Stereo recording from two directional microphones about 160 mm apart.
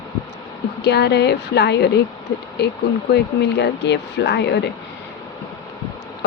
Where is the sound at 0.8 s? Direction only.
90° left.